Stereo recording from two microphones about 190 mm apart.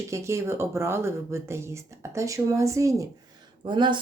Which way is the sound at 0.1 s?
15° right (ahead or behind).